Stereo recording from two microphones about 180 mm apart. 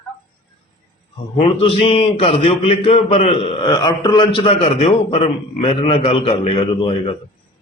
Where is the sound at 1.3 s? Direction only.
35° left (ahead or behind).